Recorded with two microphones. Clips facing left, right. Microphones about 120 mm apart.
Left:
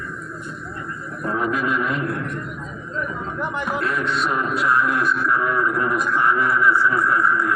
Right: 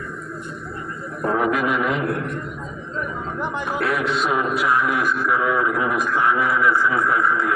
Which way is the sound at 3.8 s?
65° right (ahead or behind).